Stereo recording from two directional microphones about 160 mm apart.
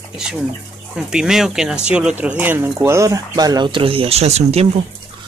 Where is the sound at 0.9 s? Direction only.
5° right (ahead or behind); by 4.6 s 40° right (ahead or behind).